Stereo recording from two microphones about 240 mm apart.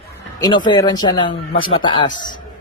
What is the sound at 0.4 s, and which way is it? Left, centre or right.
Speech, centre.